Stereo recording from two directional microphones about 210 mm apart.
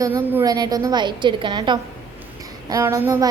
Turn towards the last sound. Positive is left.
turn(degrees=-15)  # may be behind; listen again after turning